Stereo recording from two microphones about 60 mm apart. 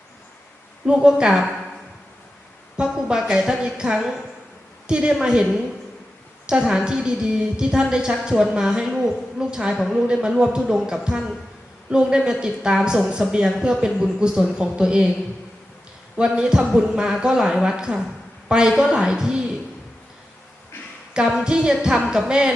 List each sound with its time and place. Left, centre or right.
0.9 s speech: centre
2.7 s speech: centre
6.5 s a woman's voice: centre
16.1 s speech: centre
21.1 s speech: centre